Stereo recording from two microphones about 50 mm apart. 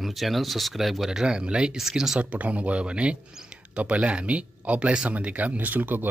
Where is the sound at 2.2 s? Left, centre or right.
Right.